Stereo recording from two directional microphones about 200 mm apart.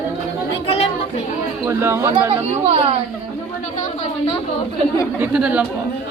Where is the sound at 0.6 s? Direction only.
30° left (ahead or behind).